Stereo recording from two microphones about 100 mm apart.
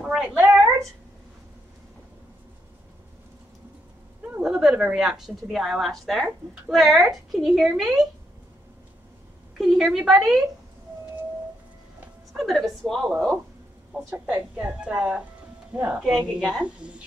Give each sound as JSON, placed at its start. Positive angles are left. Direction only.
{"t": 0.0, "sound": "a sound", "side_deg": -5}
{"t": 4.4, "sound": "a woman's voice", "side_deg": -5}
{"t": 9.6, "sound": "a woman's voice", "side_deg": -5}
{"t": 12.3, "sound": "a woman's voice", "side_deg": 0}
{"t": 13.9, "sound": "speech", "side_deg": -15}